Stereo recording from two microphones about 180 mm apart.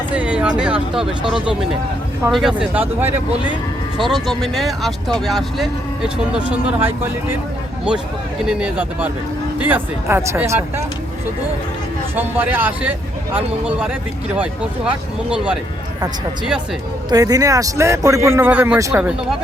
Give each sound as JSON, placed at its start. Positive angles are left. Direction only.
{"t": 0.1, "sound": "speech", "side_deg": -5}
{"t": 2.3, "sound": "speech", "side_deg": -5}
{"t": 4.0, "sound": "speech", "side_deg": 0}
{"t": 8.4, "sound": "speech", "side_deg": -5}
{"t": 12.1, "sound": "speech", "side_deg": -10}
{"t": 17.1, "sound": "speech", "side_deg": -20}